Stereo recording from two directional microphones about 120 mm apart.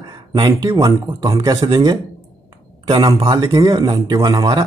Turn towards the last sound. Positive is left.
turn(degrees=-30)  # may be behind; listen again after turning